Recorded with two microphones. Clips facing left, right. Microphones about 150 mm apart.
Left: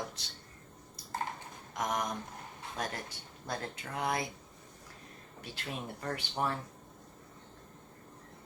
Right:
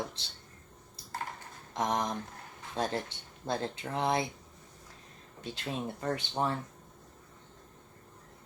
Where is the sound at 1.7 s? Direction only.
25° right (ahead or behind).